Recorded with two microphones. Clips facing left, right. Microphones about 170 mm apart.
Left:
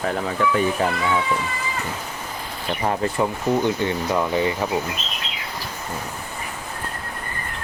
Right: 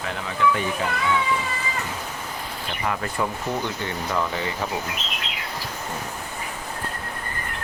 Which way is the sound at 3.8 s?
20° left (ahead or behind).